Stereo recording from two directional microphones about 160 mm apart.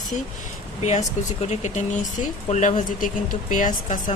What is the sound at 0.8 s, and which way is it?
A woman's voice, 45° left (ahead or behind).